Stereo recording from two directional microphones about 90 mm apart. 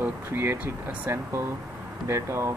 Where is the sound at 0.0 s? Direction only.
25° right (ahead or behind).